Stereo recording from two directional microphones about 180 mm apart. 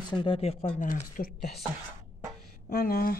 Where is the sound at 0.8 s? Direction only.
45° left (ahead or behind).